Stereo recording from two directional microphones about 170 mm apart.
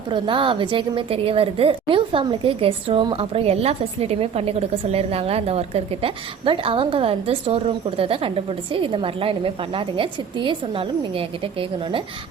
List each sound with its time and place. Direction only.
0.1 s a woman's voice: 30° right (ahead or behind)